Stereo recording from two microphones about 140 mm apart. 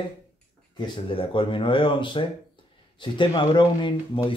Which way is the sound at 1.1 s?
40° left (ahead or behind).